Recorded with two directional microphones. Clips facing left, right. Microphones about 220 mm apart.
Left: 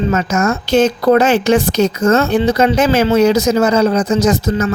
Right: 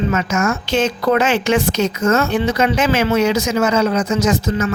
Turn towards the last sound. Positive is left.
turn(degrees=35)  # may be behind; listen again after turning